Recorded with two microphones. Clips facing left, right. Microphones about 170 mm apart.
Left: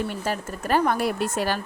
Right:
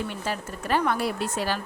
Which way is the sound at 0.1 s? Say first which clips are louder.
Left 3 dB; 45° left (ahead or behind).